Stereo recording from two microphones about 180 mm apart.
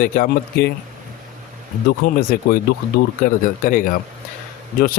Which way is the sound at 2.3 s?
55° left (ahead or behind).